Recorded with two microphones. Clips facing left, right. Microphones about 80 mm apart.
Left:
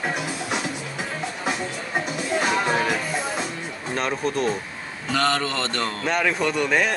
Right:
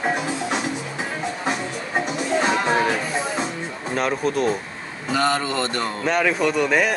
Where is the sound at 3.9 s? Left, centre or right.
Centre.